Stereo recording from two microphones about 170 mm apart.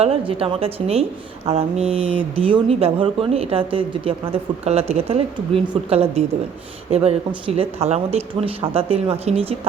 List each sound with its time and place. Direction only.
0.0 s speech: 35° right (ahead or behind)